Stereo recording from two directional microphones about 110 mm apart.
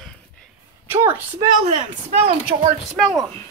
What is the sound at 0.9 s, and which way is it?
Speech, 20° right (ahead or behind).